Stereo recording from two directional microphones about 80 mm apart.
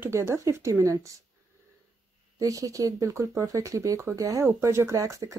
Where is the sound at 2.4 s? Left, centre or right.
Right.